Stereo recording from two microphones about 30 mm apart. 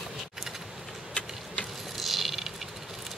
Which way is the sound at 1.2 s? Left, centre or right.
Left.